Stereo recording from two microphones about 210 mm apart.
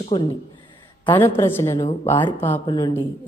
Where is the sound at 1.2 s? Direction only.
10° left (ahead or behind).